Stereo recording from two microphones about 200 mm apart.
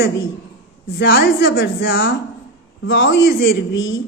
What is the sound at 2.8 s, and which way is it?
A man's voice, 70° left (ahead or behind).